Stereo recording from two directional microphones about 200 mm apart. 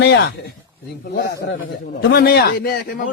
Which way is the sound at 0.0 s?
60° left (ahead or behind).